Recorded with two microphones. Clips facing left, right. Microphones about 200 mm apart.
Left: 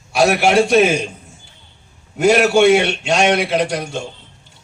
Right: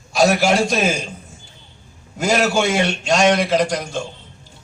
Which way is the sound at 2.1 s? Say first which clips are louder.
Left 6 dB; 65° left (ahead or behind).